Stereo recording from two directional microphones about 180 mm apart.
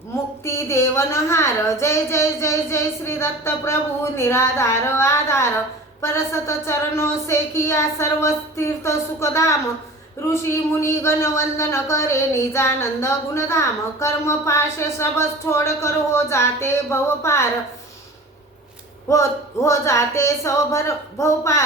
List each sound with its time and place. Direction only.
0.4 s a man's voice: 15° left (ahead or behind)
19.0 s a man's voice: 15° left (ahead or behind)